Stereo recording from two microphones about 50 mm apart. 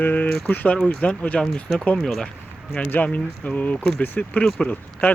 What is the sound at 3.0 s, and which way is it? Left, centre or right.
Speech, left.